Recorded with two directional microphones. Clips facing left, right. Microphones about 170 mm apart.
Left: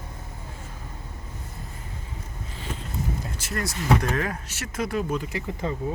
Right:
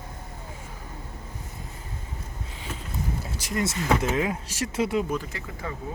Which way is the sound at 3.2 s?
10° right (ahead or behind).